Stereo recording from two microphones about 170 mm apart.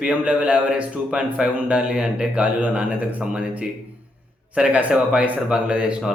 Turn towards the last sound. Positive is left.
turn(degrees=-5)  # may be behind; listen again after turning